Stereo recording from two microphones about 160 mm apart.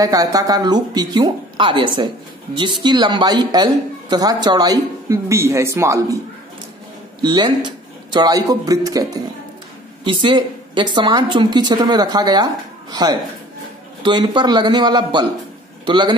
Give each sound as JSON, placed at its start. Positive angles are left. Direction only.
{"t": 0.0, "sound": "speech", "side_deg": -20}
{"t": 7.2, "sound": "a man's voice", "side_deg": -30}